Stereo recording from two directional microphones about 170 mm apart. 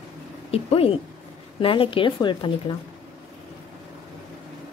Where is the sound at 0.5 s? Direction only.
35° left (ahead or behind).